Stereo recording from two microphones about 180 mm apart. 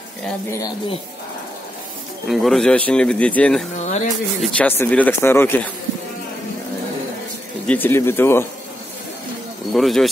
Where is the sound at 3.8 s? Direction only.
40° left (ahead or behind).